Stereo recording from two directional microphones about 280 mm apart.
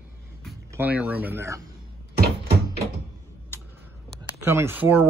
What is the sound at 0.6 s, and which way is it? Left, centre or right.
Speech, centre.